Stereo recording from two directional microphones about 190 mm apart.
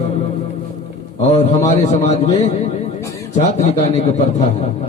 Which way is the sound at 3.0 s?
15° left (ahead or behind).